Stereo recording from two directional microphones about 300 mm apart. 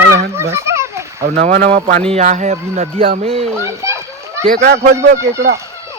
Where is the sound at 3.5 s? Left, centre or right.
Centre.